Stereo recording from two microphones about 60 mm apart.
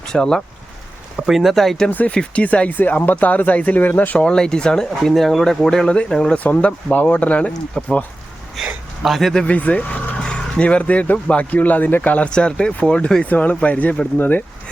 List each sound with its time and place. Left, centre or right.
0.1 s speech: centre
1.3 s speech: centre
1.9 s speech: left
4.3 s speech: centre
6.3 s speech: left
8.6 s a sound: centre
9.0 s speech: centre
9.3 s speech: centre
12.3 s speech: centre
13.2 s speech: left